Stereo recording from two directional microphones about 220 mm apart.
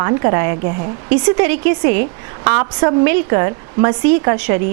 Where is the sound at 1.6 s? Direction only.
50° right (ahead or behind).